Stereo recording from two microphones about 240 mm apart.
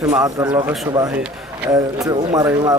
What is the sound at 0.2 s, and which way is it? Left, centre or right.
Speech, centre.